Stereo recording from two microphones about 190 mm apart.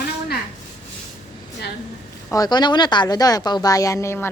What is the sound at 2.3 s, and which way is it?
A woman's voice, 20° left (ahead or behind).